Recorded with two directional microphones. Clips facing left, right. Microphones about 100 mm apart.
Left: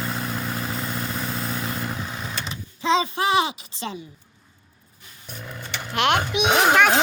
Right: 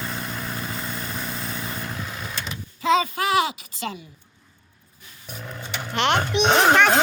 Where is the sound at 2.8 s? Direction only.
25° left (ahead or behind).